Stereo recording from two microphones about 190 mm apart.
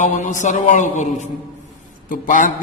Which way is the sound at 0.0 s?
40° left (ahead or behind).